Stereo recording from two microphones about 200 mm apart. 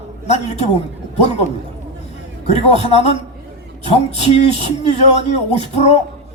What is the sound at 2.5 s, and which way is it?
A man's voice, 30° left (ahead or behind).